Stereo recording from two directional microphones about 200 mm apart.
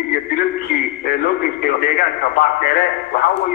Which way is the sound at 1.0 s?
50° left (ahead or behind).